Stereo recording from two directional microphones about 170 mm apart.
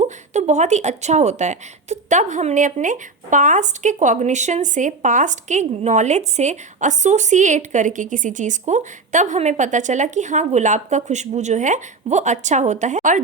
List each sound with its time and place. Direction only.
0.0 s speech: 45° right (ahead or behind)